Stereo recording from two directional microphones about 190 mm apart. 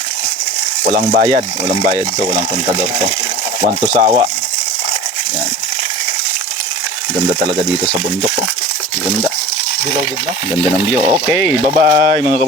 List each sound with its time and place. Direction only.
0.9 s speech: 50° right (ahead or behind)
1.6 s speech: 25° right (ahead or behind)
3.8 s a sound: 30° right (ahead or behind)
10.5 s speech: 5° right (ahead or behind)
11.8 s speech: 50° right (ahead or behind)